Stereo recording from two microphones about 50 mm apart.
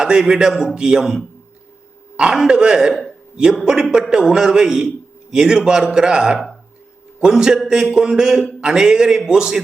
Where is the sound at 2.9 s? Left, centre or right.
Centre.